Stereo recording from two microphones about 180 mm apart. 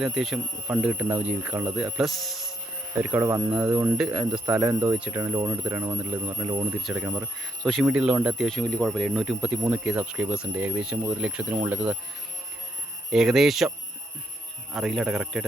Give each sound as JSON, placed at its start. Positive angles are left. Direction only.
{"t": 0.0, "sound": "speech", "side_deg": 0}
{"t": 3.0, "sound": "speech", "side_deg": -10}
{"t": 4.9, "sound": "speech", "side_deg": -10}
{"t": 6.8, "sound": "speech", "side_deg": -5}
{"t": 13.1, "sound": "speech", "side_deg": 0}